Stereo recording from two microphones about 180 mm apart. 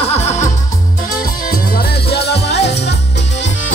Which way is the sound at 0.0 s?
35° left (ahead or behind).